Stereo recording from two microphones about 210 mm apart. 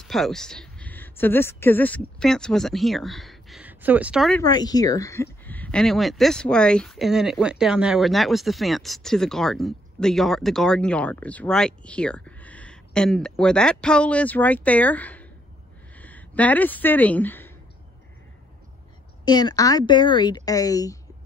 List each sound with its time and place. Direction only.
0.0 s speech: centre (ahead or behind)
4.4 s speech: 20° left (ahead or behind)
19.2 s speech: 20° left (ahead or behind)